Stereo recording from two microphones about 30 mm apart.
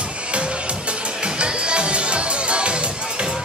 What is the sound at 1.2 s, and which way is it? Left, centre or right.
Music, right.